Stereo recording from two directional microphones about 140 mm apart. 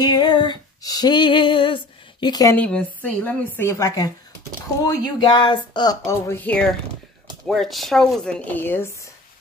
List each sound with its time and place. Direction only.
0.0 s female singing: 30° left (ahead or behind)
2.5 s a woman's voice: 10° left (ahead or behind)